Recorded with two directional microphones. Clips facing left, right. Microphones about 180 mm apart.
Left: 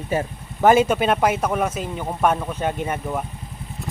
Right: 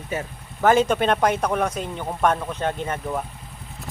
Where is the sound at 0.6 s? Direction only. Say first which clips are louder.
Left 2 dB; 10° left (ahead or behind).